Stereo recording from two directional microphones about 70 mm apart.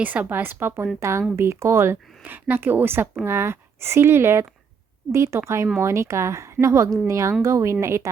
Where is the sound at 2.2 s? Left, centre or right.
Right.